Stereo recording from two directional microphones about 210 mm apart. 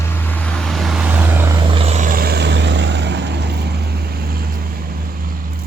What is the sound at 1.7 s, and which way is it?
Vehicle, 30° right (ahead or behind).